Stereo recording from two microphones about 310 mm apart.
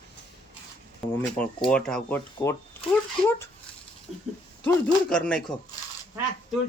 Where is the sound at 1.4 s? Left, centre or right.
Centre.